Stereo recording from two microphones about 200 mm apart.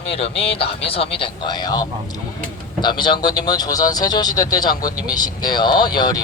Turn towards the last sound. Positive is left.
turn(degrees=20)  # may be behind; listen again after turning